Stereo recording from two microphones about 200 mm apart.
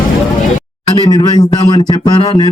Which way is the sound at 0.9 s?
20° left (ahead or behind).